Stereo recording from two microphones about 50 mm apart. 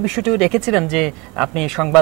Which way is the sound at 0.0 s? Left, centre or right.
Centre.